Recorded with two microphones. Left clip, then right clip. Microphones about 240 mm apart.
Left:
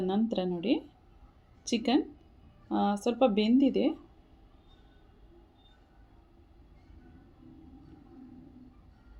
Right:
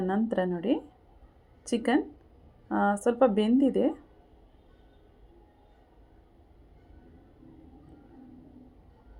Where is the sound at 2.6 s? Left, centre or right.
Centre.